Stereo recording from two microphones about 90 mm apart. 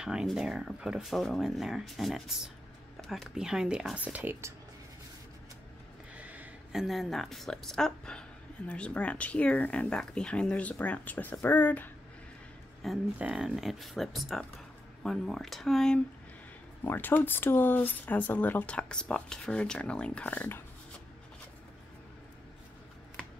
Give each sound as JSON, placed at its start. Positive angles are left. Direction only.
{"t": 0.0, "sound": "speech", "side_deg": -10}
{"t": 3.3, "sound": "speech", "side_deg": -5}
{"t": 6.1, "sound": "a sound", "side_deg": -15}
{"t": 6.7, "sound": "speech", "side_deg": 0}
{"t": 12.8, "sound": "speech", "side_deg": 0}
{"t": 16.8, "sound": "speech", "side_deg": 20}